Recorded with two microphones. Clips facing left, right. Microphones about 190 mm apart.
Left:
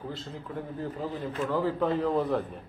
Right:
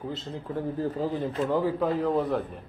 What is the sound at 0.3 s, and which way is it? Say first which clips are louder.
A man's voice: right 5 dB; 35° right (ahead or behind).